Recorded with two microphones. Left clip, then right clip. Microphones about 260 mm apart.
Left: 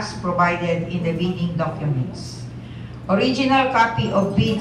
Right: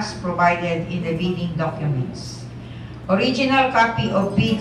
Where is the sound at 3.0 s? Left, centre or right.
Left.